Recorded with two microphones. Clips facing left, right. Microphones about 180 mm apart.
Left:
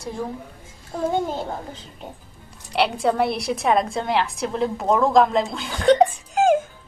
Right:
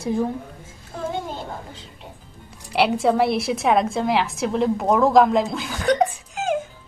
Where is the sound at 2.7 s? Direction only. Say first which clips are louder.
Right 2 dB; centre (ahead or behind).